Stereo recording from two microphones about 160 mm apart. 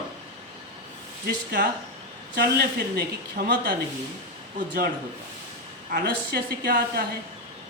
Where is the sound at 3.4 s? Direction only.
65° right (ahead or behind).